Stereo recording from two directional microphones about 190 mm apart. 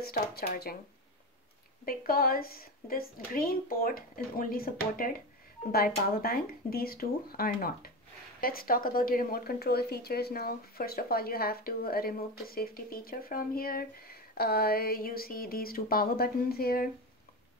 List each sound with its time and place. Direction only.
0.0 s speech: 55° left (ahead or behind)
1.9 s speech: 50° left (ahead or behind)